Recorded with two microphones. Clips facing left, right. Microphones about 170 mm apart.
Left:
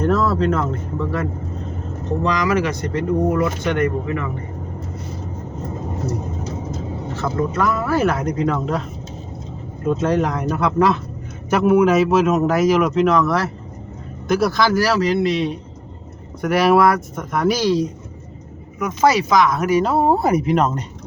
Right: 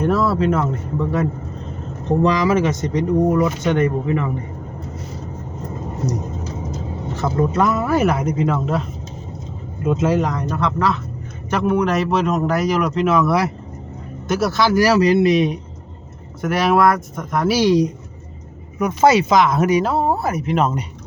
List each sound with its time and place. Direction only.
0.0 s speech: 10° right (ahead or behind)
2.6 s speech: 20° right (ahead or behind)
7.2 s speech: 20° right (ahead or behind); by 8.8 s 5° right (ahead or behind)
9.8 s speech: 5° right (ahead or behind)
14.8 s speech: 15° right (ahead or behind)
16.4 s speech: centre (ahead or behind)
17.6 s speech: 15° right (ahead or behind)
19.8 s speech: centre (ahead or behind)
20.1 s speech: 15° left (ahead or behind)
20.6 s speech: 5° right (ahead or behind)